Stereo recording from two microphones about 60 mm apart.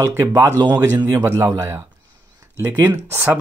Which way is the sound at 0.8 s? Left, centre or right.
Right.